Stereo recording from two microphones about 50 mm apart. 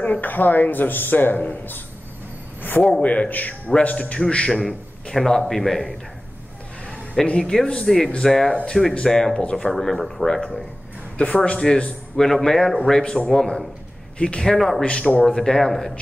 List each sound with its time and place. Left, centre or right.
0.0 s speech: left
2.9 s a man's voice: left
3.8 s a man's voice: left
4.5 s speech: centre
7.3 s speech: centre
9.4 s a man's voice: left
9.7 s a man's voice: centre
14.1 s speech: centre
14.4 s speech: centre
14.9 s speech: centre